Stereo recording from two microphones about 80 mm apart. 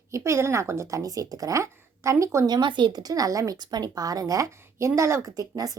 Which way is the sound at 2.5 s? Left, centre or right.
Right.